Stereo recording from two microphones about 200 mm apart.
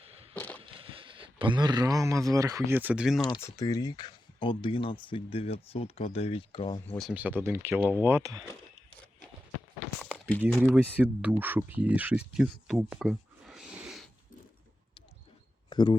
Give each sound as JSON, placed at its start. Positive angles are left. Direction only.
{"t": 0.3, "sound": "a sound", "side_deg": 10}
{"t": 0.6, "sound": "speech", "side_deg": -25}
{"t": 3.2, "sound": "speech", "side_deg": 20}
{"t": 6.8, "sound": "speech", "side_deg": 5}
{"t": 7.1, "sound": "speech", "side_deg": -10}
{"t": 10.0, "sound": "a sound", "side_deg": 5}
{"t": 10.6, "sound": "speech", "side_deg": -10}
{"t": 12.9, "sound": "a sound", "side_deg": -5}
{"t": 15.7, "sound": "speech", "side_deg": 20}